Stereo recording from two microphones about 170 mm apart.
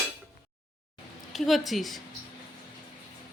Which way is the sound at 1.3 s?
Centre (ahead or behind).